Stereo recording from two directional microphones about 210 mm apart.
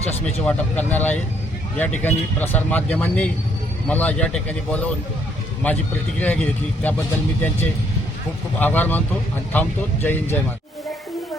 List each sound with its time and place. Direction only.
0.1 s speech: 30° left (ahead or behind)
0.4 s speech: 10° left (ahead or behind)
8.5 s speech: 10° left (ahead or behind)